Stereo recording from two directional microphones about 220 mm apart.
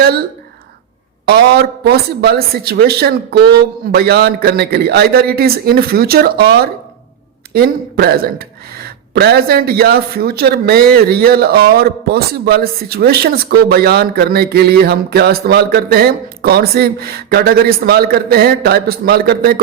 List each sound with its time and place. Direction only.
1.2 s a man's voice: 45° right (ahead or behind)